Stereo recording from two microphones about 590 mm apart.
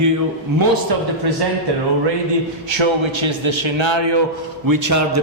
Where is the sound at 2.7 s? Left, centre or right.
Right.